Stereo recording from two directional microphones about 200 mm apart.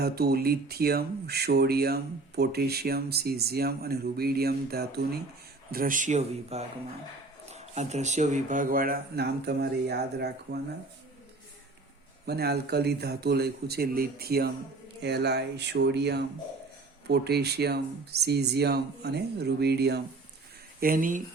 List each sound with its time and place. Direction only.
0.0 s speech: 50° right (ahead or behind)
12.2 s speech: 50° right (ahead or behind)
20.8 s speech: 45° right (ahead or behind)